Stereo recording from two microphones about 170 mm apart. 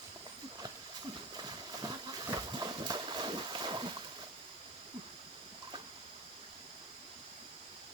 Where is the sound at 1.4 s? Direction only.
25° right (ahead or behind).